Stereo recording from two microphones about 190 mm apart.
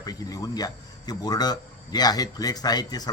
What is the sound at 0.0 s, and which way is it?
A man's voice, 20° left (ahead or behind).